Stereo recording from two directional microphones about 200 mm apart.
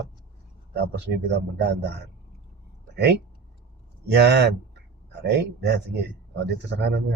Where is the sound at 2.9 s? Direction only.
60° right (ahead or behind).